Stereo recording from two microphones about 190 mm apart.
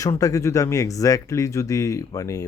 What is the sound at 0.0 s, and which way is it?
Speech, 15° left (ahead or behind).